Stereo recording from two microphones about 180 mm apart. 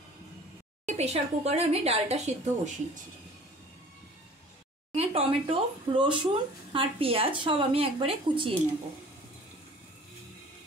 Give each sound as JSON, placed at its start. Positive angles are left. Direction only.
{"t": 0.8, "sound": "speech", "side_deg": -35}
{"t": 4.9, "sound": "speech", "side_deg": -30}